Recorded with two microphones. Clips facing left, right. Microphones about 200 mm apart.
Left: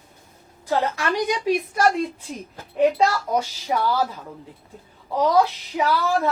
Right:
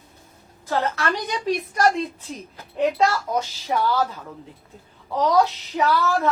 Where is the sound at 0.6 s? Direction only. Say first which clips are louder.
Left 1 dB; 15° left (ahead or behind).